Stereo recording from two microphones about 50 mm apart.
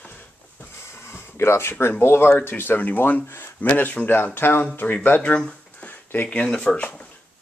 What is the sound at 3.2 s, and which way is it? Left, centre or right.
Speech, left.